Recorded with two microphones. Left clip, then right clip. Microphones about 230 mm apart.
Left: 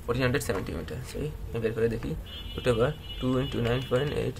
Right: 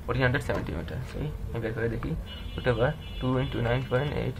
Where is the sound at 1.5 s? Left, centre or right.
Left.